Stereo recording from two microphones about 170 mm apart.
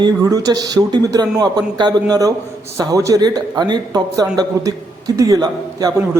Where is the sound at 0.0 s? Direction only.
20° right (ahead or behind).